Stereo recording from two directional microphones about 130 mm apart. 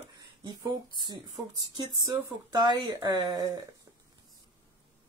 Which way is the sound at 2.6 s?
30° right (ahead or behind).